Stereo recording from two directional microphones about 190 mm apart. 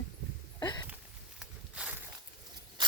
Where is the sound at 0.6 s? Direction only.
20° left (ahead or behind).